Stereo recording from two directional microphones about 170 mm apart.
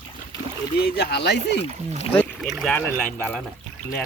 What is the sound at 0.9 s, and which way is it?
Speech, 75° left (ahead or behind).